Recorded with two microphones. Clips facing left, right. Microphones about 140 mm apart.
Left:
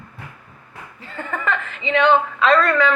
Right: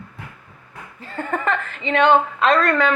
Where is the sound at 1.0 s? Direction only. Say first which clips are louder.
Right 3 dB; 40° right (ahead or behind).